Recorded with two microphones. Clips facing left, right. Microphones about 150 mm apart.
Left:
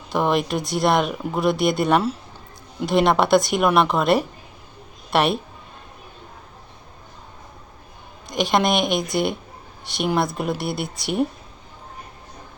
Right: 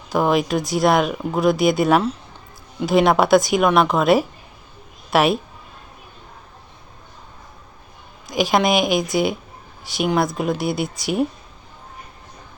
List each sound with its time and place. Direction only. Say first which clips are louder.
0.1 s speech: right 2 dB; centre (ahead or behind)
8.3 s speech: right 2 dB; centre (ahead or behind)